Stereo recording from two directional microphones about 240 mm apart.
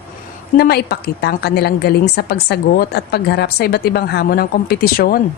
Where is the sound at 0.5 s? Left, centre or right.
Left.